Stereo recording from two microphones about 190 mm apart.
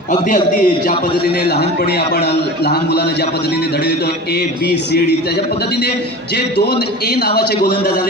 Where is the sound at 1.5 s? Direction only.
60° left (ahead or behind).